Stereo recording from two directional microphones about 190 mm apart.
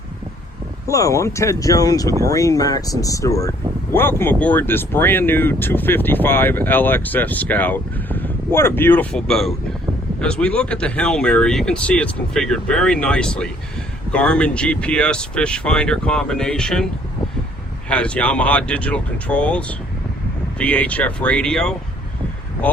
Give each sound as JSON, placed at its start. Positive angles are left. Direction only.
{"t": 0.9, "sound": "speech", "side_deg": 15}